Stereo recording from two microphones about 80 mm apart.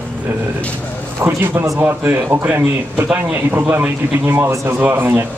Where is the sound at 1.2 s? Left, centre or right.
Right.